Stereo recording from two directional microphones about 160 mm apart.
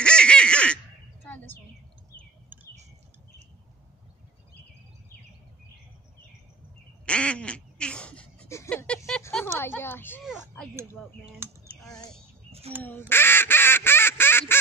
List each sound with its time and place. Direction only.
0.0 s honk: 5° left (ahead or behind)
1.2 s a sound: 10° left (ahead or behind)
7.1 s quack: 5° left (ahead or behind)
8.6 s a sound: 5° left (ahead or behind)
10.2 s speech: centre (ahead or behind)
11.3 s typing: 15° right (ahead or behind)
13.1 s quack: 15° left (ahead or behind)